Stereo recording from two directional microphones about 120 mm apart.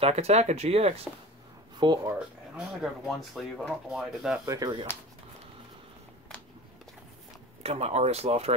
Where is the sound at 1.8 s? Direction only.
40° right (ahead or behind).